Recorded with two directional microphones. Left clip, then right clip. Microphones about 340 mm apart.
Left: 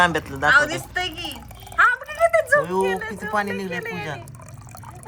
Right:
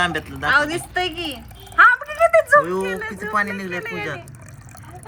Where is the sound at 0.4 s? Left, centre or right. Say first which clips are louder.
Left 1 dB; centre.